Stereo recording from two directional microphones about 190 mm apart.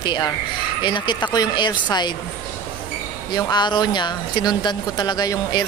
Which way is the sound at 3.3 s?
20° left (ahead or behind).